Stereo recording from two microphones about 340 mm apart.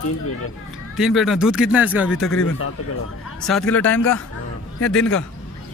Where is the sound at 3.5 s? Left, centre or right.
Centre.